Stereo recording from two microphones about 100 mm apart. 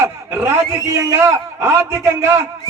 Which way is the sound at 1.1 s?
30° right (ahead or behind).